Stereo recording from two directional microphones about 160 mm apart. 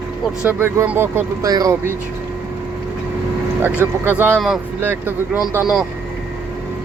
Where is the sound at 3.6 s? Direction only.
15° right (ahead or behind).